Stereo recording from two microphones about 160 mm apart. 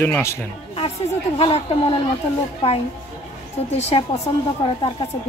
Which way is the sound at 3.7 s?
45° left (ahead or behind).